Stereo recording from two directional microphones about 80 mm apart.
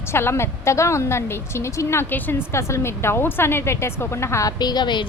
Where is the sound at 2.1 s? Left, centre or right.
Left.